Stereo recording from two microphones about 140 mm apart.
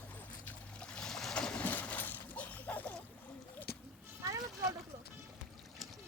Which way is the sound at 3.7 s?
90° left.